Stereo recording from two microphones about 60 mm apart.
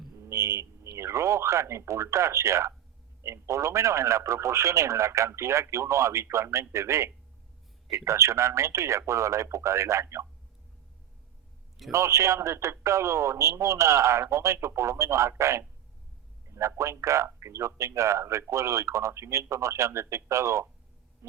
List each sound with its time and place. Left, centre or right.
0.2 s a sound: right
3.2 s speech: right
11.9 s speech: right